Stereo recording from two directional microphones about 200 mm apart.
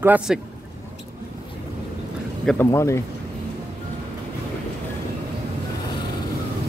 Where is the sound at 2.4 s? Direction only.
10° left (ahead or behind).